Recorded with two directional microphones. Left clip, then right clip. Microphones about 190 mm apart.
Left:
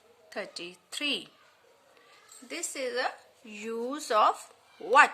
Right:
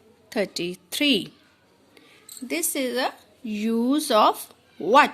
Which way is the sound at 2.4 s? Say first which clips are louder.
Right 8 dB; 35° right (ahead or behind).